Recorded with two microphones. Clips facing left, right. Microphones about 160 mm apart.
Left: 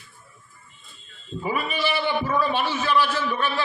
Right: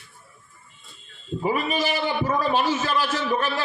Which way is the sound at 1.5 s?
45° right (ahead or behind).